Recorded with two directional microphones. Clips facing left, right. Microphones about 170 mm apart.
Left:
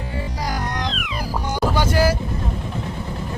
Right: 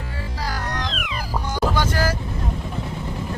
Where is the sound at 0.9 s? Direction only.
Centre (ahead or behind).